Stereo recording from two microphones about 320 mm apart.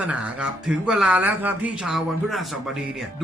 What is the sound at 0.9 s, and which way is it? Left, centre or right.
Speech, centre.